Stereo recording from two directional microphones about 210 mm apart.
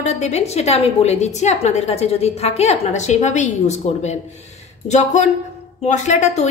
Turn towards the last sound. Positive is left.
turn(degrees=35)  # may be behind; listen again after turning